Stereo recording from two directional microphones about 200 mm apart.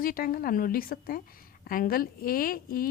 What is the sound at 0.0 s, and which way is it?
A woman's voice, 45° left (ahead or behind).